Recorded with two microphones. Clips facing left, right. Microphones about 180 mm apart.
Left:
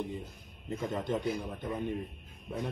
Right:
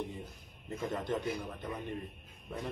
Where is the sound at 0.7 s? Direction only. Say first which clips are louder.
Left 2 dB; centre (ahead or behind).